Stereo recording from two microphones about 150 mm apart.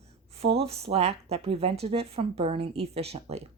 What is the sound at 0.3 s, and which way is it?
Speech, 40° right (ahead or behind).